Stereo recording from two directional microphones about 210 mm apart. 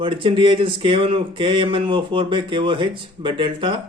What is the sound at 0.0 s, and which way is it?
Speech, 25° right (ahead or behind).